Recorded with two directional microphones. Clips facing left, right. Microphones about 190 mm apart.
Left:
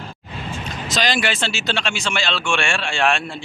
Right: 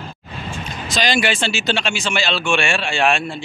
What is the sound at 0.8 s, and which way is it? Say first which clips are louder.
Speech: right 2 dB; centre (ahead or behind).